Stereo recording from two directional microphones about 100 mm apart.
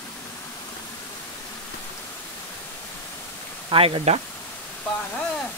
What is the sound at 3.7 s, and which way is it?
Speech, 65° right (ahead or behind).